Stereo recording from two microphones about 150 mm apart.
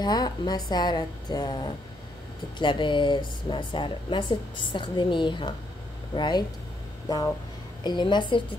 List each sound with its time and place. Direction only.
0.0 s a woman's voice: 25° left (ahead or behind)
7.8 s a woman's voice: 30° left (ahead or behind)